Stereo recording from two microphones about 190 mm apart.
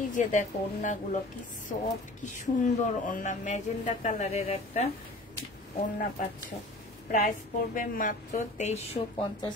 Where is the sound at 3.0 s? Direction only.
40° left (ahead or behind).